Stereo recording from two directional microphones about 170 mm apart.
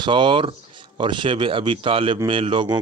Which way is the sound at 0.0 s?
30° right (ahead or behind).